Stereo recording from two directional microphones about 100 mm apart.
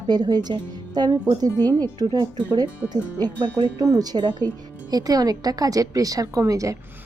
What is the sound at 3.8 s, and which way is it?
A woman's voice, 40° right (ahead or behind).